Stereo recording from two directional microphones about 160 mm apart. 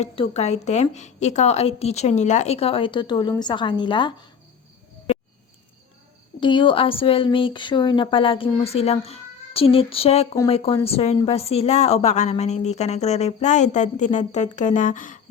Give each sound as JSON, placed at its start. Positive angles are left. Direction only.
{"t": 0.0, "sound": "a woman's voice", "side_deg": 40}
{"t": 6.4, "sound": "a woman's voice", "side_deg": 30}